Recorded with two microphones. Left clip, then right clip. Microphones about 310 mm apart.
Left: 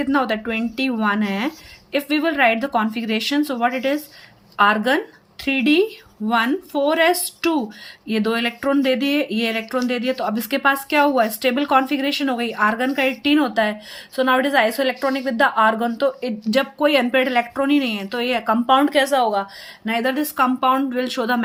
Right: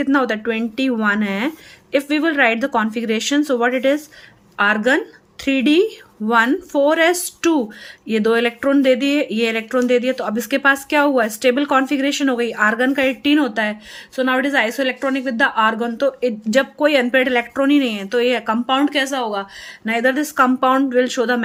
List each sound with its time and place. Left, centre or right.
0.0 s speech: centre
19.0 s speech: right
19.3 s speech: centre